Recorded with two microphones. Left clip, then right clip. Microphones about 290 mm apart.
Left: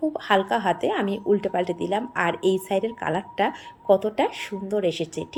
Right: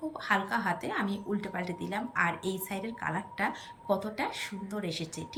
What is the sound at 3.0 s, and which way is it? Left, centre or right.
Speech, left.